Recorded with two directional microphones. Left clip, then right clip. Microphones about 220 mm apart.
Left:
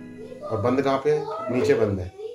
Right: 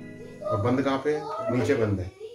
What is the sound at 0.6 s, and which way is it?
Speech, 20° left (ahead or behind).